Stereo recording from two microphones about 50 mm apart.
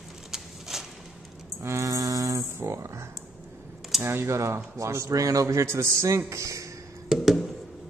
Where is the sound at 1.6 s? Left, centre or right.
Right.